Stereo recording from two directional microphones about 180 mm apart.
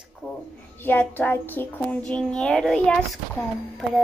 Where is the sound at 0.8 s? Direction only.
10° left (ahead or behind).